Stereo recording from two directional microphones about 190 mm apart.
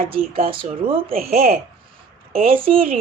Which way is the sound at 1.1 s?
50° right (ahead or behind).